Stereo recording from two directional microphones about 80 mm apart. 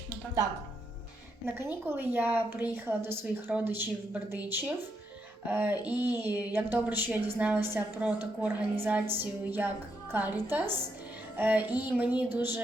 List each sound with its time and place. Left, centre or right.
1.5 s speech: right
5.5 s speech: right